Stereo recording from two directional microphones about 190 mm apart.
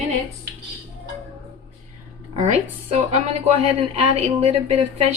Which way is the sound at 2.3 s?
35° right (ahead or behind).